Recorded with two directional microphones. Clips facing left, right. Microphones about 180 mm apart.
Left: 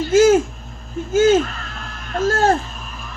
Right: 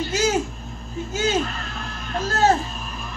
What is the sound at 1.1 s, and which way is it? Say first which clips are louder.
Speech: left 9 dB; 50° left (ahead or behind).